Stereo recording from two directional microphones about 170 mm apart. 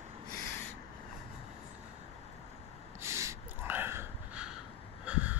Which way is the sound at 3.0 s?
15° right (ahead or behind).